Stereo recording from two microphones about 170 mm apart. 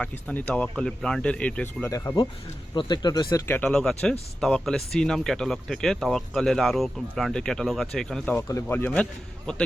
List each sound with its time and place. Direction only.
0.0 s speech: 5° left (ahead or behind); by 3.4 s 25° left (ahead or behind)
3.4 s speech: 10° left (ahead or behind)